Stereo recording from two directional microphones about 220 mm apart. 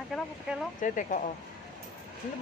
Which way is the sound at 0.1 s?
Centre (ahead or behind).